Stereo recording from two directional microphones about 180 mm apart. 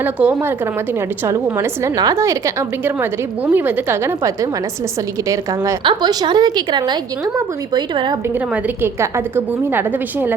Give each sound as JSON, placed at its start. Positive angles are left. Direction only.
{"t": 0.0, "sound": "a woman's voice", "side_deg": -10}
{"t": 8.6, "sound": "a woman's voice", "side_deg": -15}